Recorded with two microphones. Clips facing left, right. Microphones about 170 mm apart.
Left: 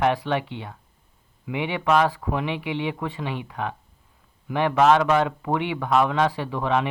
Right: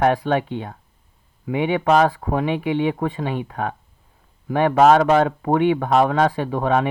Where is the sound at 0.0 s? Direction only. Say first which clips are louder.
Right 4 dB; 45° right (ahead or behind).